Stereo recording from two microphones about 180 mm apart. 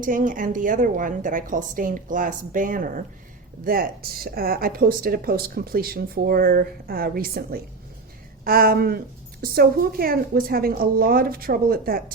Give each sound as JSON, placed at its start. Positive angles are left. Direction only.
{"t": 0.0, "sound": "a woman's voice", "side_deg": -50}